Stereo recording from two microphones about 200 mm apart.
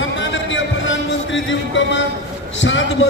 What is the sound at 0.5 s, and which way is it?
Music, 70° left (ahead or behind).